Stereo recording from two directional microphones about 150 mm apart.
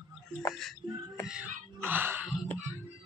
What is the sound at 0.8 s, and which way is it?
Music, 30° right (ahead or behind).